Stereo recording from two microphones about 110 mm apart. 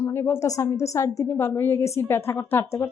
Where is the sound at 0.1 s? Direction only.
25° left (ahead or behind).